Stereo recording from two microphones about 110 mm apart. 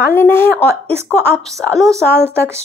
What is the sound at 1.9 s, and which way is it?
Speech, 25° right (ahead or behind).